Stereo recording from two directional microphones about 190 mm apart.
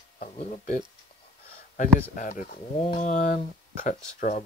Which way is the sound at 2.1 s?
45° left (ahead or behind).